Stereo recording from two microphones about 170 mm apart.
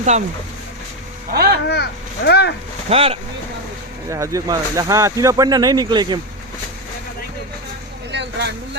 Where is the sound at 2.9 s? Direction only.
35° right (ahead or behind).